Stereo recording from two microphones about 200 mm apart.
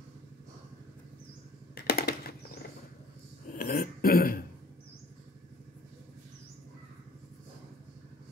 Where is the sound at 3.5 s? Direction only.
45° left (ahead or behind).